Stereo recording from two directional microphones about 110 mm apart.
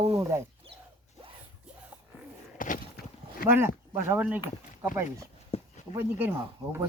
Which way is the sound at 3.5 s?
20° right (ahead or behind).